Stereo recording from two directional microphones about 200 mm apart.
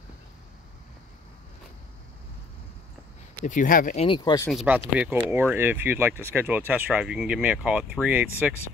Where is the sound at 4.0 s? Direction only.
25° left (ahead or behind).